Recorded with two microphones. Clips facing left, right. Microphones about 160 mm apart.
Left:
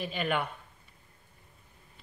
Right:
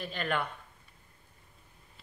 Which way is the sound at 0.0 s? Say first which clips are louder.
Left 2 dB; 5° left (ahead or behind).